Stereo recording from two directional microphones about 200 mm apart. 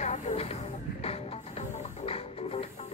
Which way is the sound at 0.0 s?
35° left (ahead or behind).